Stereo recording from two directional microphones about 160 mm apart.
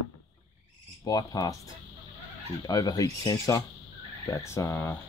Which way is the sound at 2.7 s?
20° left (ahead or behind).